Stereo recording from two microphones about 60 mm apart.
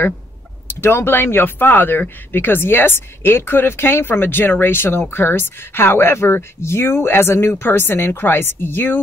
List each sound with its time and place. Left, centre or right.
0.7 s speech: left